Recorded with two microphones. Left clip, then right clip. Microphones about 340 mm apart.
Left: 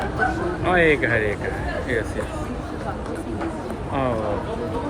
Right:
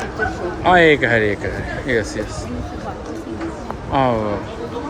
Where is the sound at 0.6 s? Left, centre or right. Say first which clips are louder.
Right 6 dB; right.